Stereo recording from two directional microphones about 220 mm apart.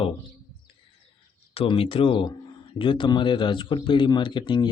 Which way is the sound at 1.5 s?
25° left (ahead or behind).